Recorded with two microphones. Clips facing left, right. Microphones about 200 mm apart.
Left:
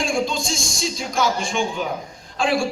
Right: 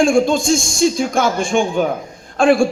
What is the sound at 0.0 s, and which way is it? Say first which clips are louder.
A man's voice: right 9 dB; 50° right (ahead or behind).